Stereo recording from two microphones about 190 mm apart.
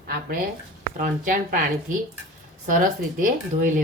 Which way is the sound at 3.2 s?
45° right (ahead or behind).